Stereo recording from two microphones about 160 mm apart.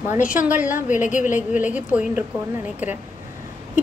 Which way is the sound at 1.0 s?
50° left (ahead or behind).